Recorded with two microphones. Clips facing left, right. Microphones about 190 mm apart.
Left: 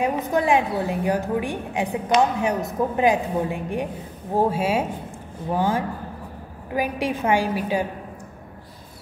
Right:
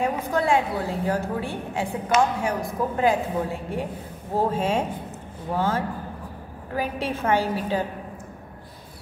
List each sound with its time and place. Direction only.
0.0 s a woman's voice: 15° left (ahead or behind)